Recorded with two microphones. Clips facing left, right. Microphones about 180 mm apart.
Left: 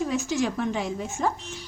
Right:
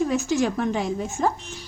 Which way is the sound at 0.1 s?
50° right (ahead or behind).